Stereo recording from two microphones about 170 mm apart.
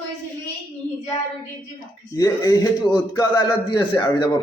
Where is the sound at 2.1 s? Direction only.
20° left (ahead or behind).